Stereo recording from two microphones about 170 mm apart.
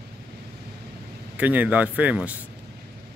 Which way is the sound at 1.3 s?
10° right (ahead or behind).